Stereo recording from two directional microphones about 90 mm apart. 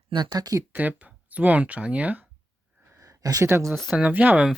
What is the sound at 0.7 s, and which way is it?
Speech, 20° right (ahead or behind).